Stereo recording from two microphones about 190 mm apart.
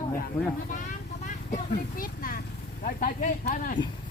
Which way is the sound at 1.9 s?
50° left (ahead or behind).